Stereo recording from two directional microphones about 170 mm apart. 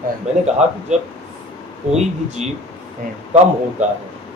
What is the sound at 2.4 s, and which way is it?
Speech, 40° right (ahead or behind).